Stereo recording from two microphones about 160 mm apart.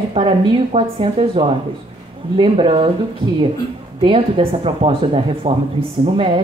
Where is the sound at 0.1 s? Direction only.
30° right (ahead or behind).